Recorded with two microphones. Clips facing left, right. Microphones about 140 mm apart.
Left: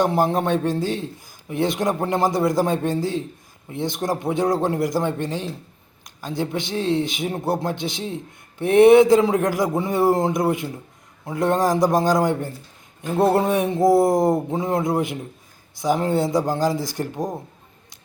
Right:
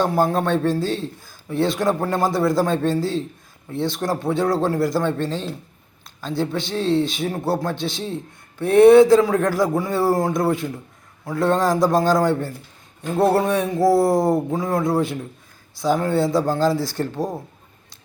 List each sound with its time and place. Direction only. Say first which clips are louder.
0.0 s a man's voice: even; 20° left (ahead or behind)